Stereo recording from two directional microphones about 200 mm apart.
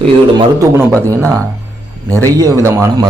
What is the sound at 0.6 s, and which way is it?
Speech, 15° right (ahead or behind).